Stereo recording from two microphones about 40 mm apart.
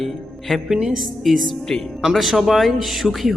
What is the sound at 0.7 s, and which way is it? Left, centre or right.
Music, centre.